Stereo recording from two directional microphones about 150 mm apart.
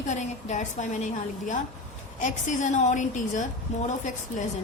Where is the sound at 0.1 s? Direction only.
50° left (ahead or behind).